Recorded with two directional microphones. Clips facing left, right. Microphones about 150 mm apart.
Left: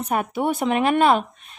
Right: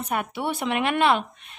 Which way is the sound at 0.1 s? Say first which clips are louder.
Left 5 dB; 40° left (ahead or behind).